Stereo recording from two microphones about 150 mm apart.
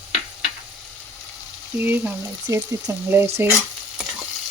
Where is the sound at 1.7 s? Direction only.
15° right (ahead or behind).